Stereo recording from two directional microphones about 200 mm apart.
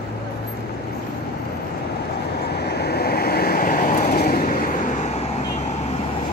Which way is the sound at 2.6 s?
55° left (ahead or behind).